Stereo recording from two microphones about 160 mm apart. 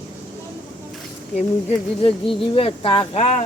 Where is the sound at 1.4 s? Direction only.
40° left (ahead or behind).